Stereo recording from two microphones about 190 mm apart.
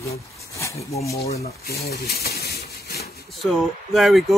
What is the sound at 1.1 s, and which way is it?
Speech, 35° left (ahead or behind).